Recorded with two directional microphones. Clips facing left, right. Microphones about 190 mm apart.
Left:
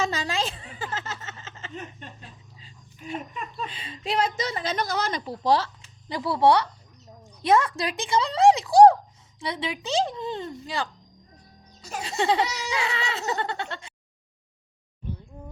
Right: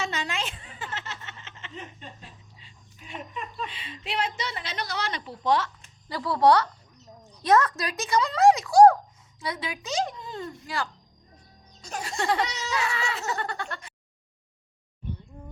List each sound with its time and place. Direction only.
0.0 s a sound: 35° left (ahead or behind)
3.7 s a woman's voice: 40° left (ahead or behind)
6.1 s speech: 15° left (ahead or behind)
7.4 s giggle: 25° left (ahead or behind)
12.0 s giggle: 20° left (ahead or behind)